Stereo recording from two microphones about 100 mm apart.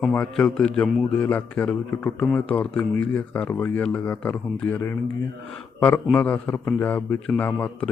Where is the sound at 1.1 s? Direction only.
15° left (ahead or behind).